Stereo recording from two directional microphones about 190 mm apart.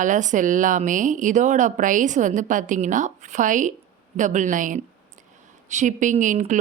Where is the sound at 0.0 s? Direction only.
40° right (ahead or behind).